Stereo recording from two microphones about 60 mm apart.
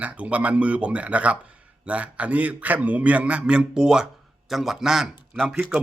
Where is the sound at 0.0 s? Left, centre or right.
Right; by 5.0 s centre.